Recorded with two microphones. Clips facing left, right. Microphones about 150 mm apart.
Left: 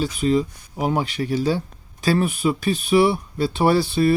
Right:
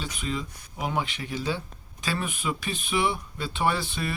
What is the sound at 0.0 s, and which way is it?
Speech, 40° left (ahead or behind).